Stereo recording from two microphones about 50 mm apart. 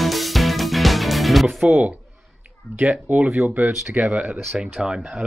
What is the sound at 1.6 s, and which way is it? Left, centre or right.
Speech, right.